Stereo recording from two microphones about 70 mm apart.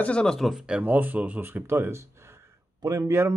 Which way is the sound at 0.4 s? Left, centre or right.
Centre.